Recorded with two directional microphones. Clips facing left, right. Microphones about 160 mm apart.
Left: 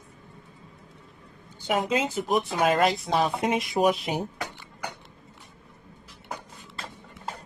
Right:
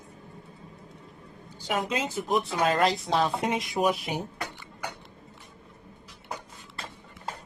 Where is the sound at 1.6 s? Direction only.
25° left (ahead or behind).